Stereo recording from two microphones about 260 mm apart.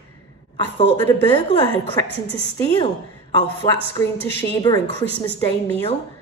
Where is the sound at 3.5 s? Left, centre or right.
Centre.